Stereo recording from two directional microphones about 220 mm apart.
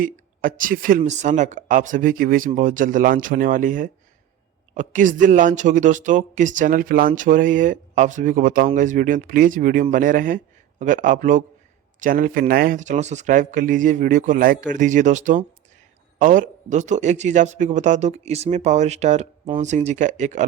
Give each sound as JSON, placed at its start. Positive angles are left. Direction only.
{"t": 0.0, "sound": "speech", "side_deg": -40}